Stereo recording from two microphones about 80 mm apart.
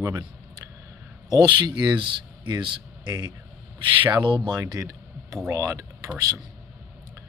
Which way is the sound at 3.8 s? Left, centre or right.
Right.